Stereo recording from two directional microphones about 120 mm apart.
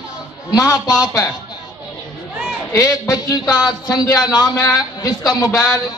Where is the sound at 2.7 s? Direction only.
30° left (ahead or behind).